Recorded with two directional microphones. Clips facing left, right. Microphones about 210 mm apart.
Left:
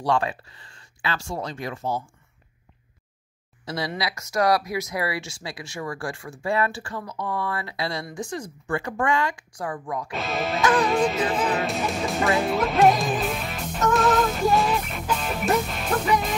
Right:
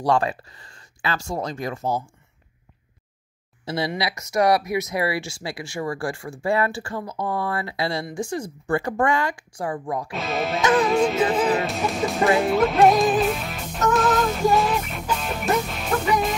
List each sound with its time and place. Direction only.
0.0 s speech: 40° right (ahead or behind)
3.6 s speech: 25° right (ahead or behind)
10.1 s speech: centre (ahead or behind)
10.7 s music: centre (ahead or behind)